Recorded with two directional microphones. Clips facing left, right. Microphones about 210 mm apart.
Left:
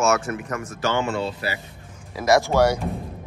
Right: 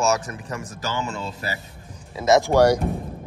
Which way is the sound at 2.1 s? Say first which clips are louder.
Right 1 dB; 25° right (ahead or behind).